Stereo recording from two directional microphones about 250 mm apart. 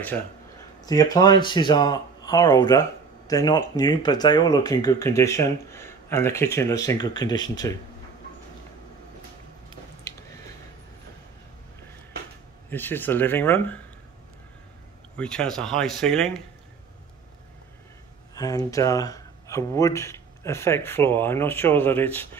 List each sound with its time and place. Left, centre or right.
0.7 s speech: centre
12.6 s speech: centre
15.1 s speech: centre
18.3 s speech: centre